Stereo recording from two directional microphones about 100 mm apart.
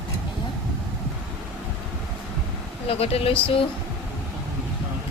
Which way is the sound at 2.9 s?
80° left.